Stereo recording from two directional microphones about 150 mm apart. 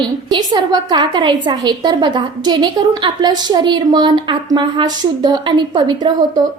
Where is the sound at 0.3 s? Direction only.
30° right (ahead or behind).